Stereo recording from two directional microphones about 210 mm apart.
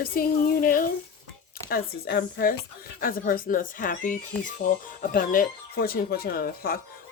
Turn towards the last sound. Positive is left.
turn(degrees=45)  # may be behind; listen again after turning